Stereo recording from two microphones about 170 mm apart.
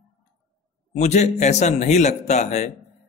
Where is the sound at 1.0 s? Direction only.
45° left (ahead or behind).